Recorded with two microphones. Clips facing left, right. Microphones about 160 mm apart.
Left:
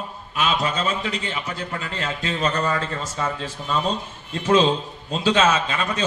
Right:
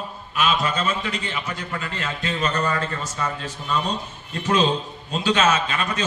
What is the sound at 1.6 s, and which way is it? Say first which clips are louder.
Speech: left 1 dB; 30° left (ahead or behind).